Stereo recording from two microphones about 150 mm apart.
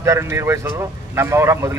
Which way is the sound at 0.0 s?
20° right (ahead or behind).